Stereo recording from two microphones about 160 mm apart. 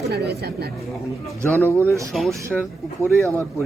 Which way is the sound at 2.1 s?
Centre (ahead or behind).